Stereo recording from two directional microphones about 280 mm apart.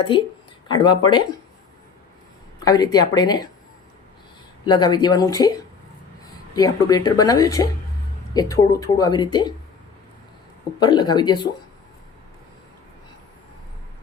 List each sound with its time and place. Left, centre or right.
0.7 s speech: centre
2.6 s speech: centre
4.6 s speech: centre
6.6 s speech: centre
10.8 s speech: centre